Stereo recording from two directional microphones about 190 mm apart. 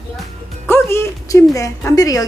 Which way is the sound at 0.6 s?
10° left (ahead or behind).